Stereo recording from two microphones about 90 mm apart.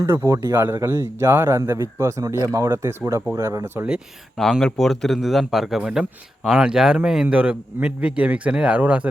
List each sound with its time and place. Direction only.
0.0 s a man's voice: 30° right (ahead or behind)
4.6 s a man's voice: 5° left (ahead or behind); by 9.0 s 15° right (ahead or behind)